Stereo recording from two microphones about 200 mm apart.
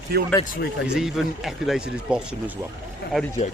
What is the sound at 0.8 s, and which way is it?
Speech, centre (ahead or behind).